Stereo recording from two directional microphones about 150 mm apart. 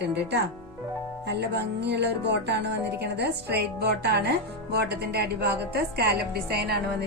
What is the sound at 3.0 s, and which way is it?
Speech, 90° right.